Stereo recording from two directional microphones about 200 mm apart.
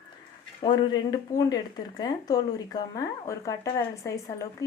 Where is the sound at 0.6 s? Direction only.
25° left (ahead or behind).